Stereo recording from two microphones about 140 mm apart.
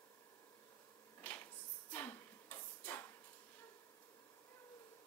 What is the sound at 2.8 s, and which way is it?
Drawer open or close, 15° left (ahead or behind).